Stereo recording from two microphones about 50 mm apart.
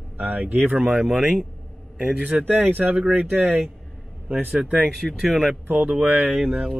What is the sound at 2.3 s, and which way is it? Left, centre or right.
Speech, right.